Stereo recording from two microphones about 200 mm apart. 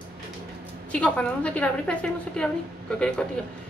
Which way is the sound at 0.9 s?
5° left (ahead or behind).